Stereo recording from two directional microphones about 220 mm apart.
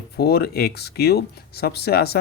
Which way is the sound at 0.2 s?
45° left (ahead or behind).